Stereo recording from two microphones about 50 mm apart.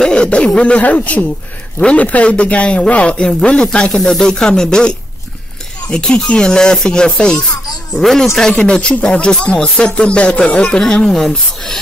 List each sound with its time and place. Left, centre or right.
0.0 s a sound: centre
0.6 s speech: left
7.9 s speech: centre